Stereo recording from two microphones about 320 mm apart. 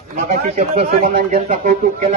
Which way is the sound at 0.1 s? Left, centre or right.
Right.